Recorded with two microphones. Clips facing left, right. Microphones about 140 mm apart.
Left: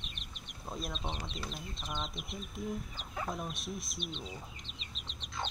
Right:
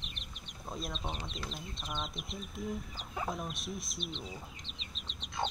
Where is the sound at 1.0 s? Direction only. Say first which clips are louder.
Even; 5° right (ahead or behind).